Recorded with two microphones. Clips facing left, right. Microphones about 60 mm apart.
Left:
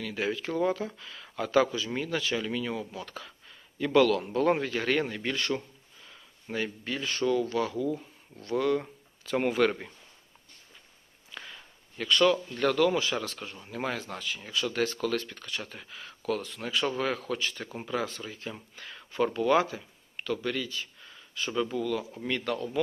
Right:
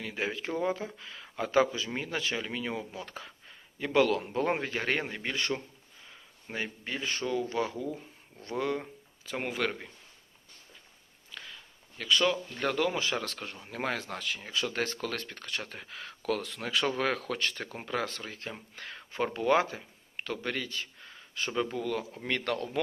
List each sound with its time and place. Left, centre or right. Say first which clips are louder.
0.0 s speech: left 3 dB; right
8.8 s speech: left 1 dB; centre
12.0 s speech: left 4 dB; centre
12.5 s speech: left 5 dB; right
13.2 s speech: left 1 dB; right
13.7 s speech: even; right
14.4 s speech: left 4 dB; right
18.9 s speech: left 4 dB; right